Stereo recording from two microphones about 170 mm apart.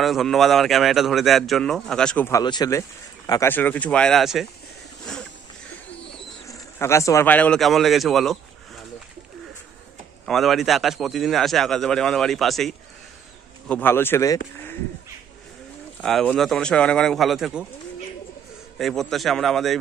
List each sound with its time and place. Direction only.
0.0 s a man's voice: centre (ahead or behind)
2.4 s speech: 25° left (ahead or behind); by 4.5 s centre (ahead or behind)
5.0 s a sound: 5° left (ahead or behind)
6.4 s speech: 15° left (ahead or behind); by 8.8 s centre (ahead or behind)
10.2 s a man's voice: centre (ahead or behind)
13.7 s speech: 10° left (ahead or behind)
16.0 s a man's voice: centre (ahead or behind)
18.8 s a man's voice: centre (ahead or behind)